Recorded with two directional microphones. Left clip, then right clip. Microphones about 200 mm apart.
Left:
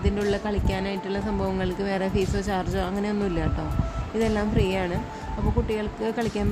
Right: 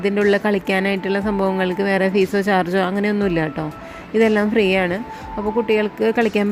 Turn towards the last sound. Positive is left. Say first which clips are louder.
# right 10 dB
turn(degrees=-25)  # may be behind; listen again after turning